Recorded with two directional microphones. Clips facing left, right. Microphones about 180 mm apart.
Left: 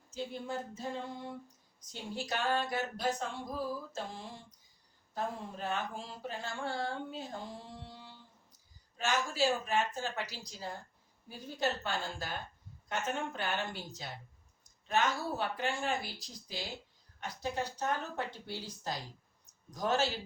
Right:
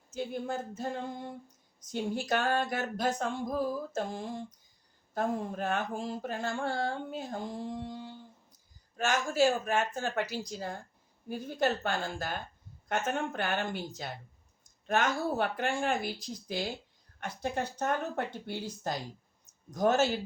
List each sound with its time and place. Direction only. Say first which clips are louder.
0.1 s mantra: right 4 dB; 50° right (ahead or behind)
1.9 s mantra: right 8 dB; 50° right (ahead or behind)
14.6 s speech: right 2 dB; 50° right (ahead or behind)
16.5 s mantra: right 7 dB; 55° right (ahead or behind)